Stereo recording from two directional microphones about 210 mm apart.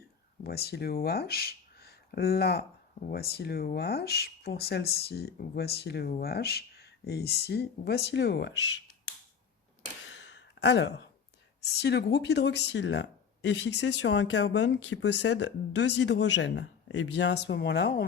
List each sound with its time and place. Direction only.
0.0 s speech: 50° left (ahead or behind)
10.0 s gasp: 60° left (ahead or behind)
11.6 s speech: 50° left (ahead or behind)